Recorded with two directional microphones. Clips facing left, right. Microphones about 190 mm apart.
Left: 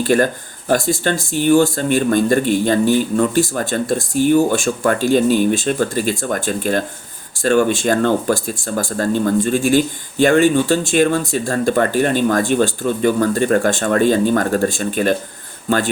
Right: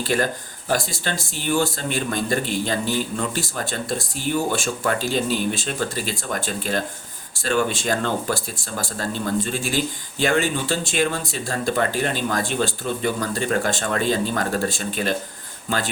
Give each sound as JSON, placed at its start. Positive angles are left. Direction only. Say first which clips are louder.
{"t": 0.0, "sound": "speech", "louder": "left 7 dB", "side_deg": 50}